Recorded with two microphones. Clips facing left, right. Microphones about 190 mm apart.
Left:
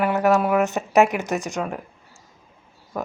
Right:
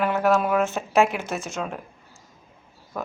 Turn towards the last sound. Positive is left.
turn(degrees=10)  # may be behind; listen again after turning